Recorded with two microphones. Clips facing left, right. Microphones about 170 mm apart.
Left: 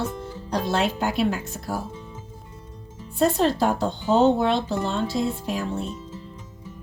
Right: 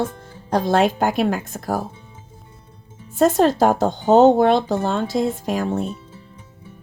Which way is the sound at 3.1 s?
45° right (ahead or behind).